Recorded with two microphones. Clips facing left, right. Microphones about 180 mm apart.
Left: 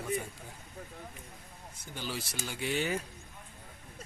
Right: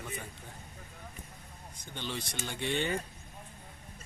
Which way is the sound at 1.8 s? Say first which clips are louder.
Even; 5° left (ahead or behind).